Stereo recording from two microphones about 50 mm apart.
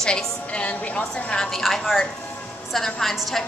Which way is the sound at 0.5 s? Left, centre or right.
Left.